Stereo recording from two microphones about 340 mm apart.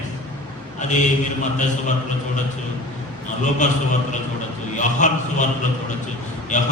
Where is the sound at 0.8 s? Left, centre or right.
Left.